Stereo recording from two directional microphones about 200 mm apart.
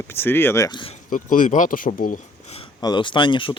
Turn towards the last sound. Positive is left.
turn(degrees=25)  # may be behind; listen again after turning